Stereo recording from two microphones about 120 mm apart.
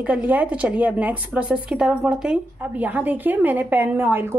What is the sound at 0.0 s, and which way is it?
A woman's voice, 10° right (ahead or behind).